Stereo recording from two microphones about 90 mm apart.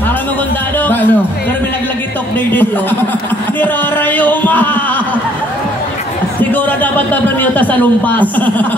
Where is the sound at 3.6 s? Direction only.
20° left (ahead or behind).